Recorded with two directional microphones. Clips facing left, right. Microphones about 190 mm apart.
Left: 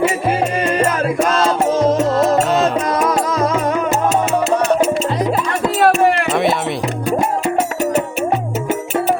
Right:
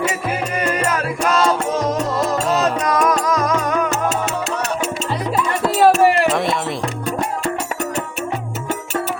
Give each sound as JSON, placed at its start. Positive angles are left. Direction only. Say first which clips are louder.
{"t": 1.2, "sound": "music", "louder": "left 1 dB", "side_deg": 30}
{"t": 5.8, "sound": "music", "louder": "right 1 dB", "side_deg": -5}